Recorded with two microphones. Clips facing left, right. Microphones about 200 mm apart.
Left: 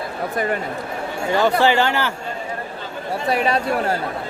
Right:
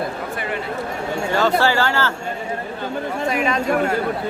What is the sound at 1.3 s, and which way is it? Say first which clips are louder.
Speech: left 2 dB; 15° left (ahead or behind).